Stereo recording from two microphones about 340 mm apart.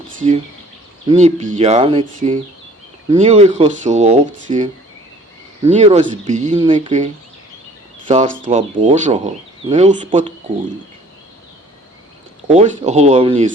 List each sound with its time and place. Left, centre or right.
0.2 s speech: right
5.7 s speech: centre
12.5 s speech: right